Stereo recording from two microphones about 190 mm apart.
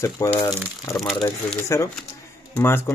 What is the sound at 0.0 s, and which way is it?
Speech, 20° left (ahead or behind).